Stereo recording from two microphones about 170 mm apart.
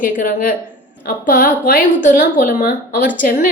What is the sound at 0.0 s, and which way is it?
A woman's voice, 50° left (ahead or behind).